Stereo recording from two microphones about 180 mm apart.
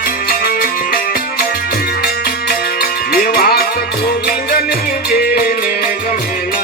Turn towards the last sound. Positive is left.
turn(degrees=55)  # may be behind; listen again after turning